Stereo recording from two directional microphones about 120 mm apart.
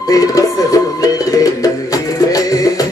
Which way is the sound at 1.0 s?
30° left (ahead or behind).